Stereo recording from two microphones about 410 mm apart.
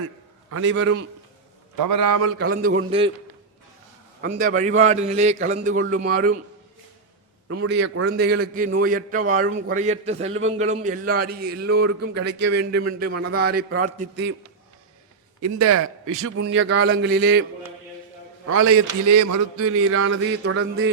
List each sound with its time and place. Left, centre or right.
0.5 s a man's voice: right
1.8 s speech: right
2.4 s a man's voice: right
4.2 s a man's voice: centre
7.4 s a man's voice: right
15.4 s a man's voice: right
18.4 s speech: right